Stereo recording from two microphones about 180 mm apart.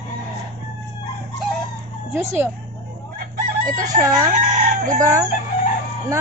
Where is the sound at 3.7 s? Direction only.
50° right (ahead or behind).